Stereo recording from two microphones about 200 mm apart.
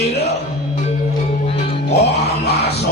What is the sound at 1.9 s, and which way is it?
Music, 55° left (ahead or behind).